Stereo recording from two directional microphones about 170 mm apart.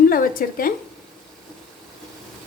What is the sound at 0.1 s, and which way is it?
Speech, 55° left (ahead or behind).